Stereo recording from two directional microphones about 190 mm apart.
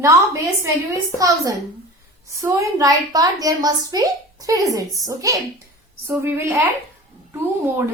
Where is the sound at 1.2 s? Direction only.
15° right (ahead or behind).